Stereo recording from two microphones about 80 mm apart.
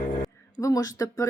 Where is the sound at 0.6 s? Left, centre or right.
Left.